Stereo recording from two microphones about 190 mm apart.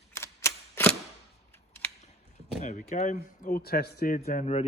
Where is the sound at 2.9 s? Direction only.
40° left (ahead or behind).